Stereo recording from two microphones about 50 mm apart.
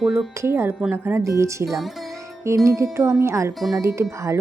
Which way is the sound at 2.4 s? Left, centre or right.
Right.